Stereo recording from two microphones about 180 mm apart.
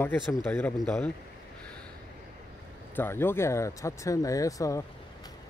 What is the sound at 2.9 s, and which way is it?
Speech, 10° left (ahead or behind).